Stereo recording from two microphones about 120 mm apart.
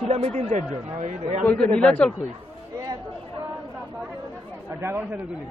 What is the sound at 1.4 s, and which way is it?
Speech, 10° left (ahead or behind).